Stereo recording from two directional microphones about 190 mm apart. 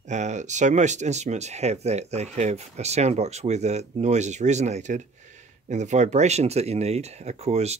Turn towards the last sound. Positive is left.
turn(degrees=-35)  # may be behind; listen again after turning